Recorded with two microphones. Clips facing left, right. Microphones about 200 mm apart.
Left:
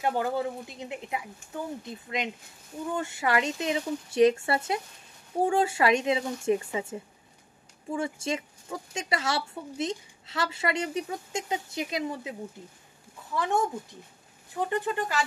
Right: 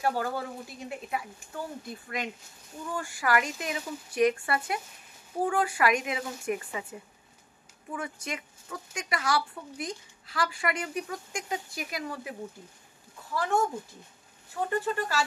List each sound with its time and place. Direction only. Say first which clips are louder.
0.0 s speech: left 2 dB; 20° left (ahead or behind)
14.7 s speech: even; 20° left (ahead or behind)